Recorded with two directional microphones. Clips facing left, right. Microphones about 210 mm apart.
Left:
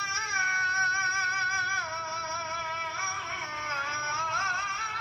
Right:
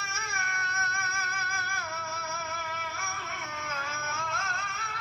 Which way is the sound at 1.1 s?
45° right (ahead or behind).